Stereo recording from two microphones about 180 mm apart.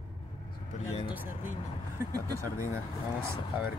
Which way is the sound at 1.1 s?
10° right (ahead or behind).